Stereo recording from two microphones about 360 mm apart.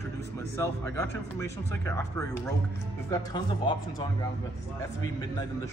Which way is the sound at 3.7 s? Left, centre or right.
Centre.